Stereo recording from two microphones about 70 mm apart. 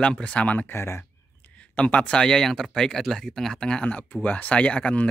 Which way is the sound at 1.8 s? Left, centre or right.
Centre.